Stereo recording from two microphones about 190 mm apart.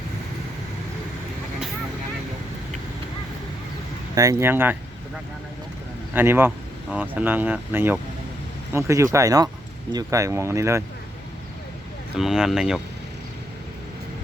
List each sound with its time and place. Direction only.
4.1 s speech: 15° right (ahead or behind)
6.1 s speech: 10° right (ahead or behind)
12.1 s speech: 5° right (ahead or behind)